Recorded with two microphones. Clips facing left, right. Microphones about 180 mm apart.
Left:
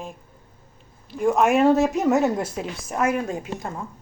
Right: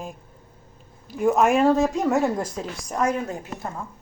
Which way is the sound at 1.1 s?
Centre (ahead or behind).